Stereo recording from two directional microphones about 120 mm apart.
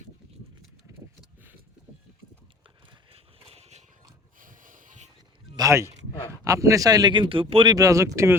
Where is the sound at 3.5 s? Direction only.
60° right (ahead or behind).